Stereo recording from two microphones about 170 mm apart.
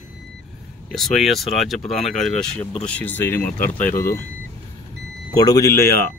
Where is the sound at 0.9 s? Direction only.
Centre (ahead or behind).